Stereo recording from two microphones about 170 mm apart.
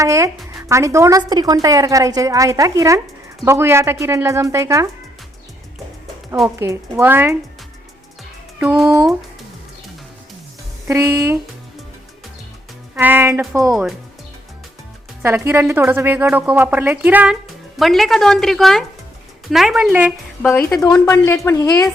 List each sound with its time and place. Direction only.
0.0 s a woman's voice: 20° right (ahead or behind)
6.6 s a woman's voice: 15° right (ahead or behind)
8.5 s speech: 5° right (ahead or behind)
10.8 s a woman's voice: 15° right (ahead or behind)
13.0 s a woman's voice: 10° right (ahead or behind)
15.2 s a woman's voice: 15° right (ahead or behind)
20.4 s speech: 10° left (ahead or behind)